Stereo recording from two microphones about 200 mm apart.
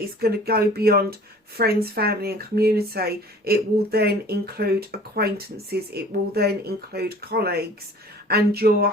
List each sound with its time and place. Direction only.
0.2 s speech: 50° right (ahead or behind)